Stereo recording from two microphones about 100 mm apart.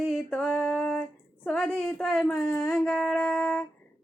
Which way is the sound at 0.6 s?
5° left (ahead or behind).